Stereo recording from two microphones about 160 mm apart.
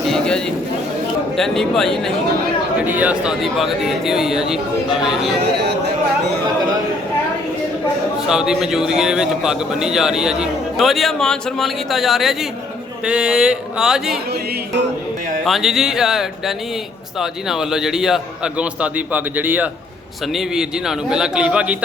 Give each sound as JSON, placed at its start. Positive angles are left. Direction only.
{"t": 0.1, "sound": "a sound", "side_deg": 5}
{"t": 1.4, "sound": "a man's voice", "side_deg": 5}
{"t": 2.8, "sound": "a man's voice", "side_deg": -10}
{"t": 5.5, "sound": "a sound", "side_deg": -90}
{"t": 8.3, "sound": "a man's voice", "side_deg": -5}
{"t": 15.4, "sound": "a man's voice", "side_deg": 0}